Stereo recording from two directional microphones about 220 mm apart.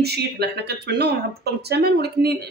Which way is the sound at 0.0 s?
45° right (ahead or behind).